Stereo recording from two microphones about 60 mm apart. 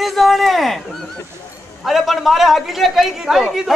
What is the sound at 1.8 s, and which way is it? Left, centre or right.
A man's voice, centre.